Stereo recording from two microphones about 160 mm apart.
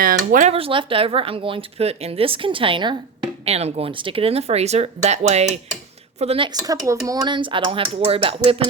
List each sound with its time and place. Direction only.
0.0 s speech: 65° right (ahead or behind)
0.5 s speech: 35° right (ahead or behind)